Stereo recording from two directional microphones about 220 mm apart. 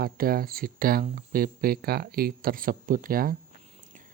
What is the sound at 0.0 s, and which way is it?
Speech, 40° right (ahead or behind).